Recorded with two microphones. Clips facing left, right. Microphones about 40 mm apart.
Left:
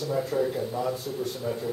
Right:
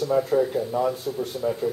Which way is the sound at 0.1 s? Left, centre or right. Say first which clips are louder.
Right 6 dB; centre.